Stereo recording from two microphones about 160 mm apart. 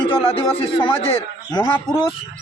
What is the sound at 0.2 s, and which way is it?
Speech, 35° left (ahead or behind).